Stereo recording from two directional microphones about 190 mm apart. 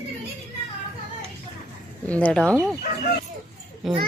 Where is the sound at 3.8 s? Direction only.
Centre (ahead or behind).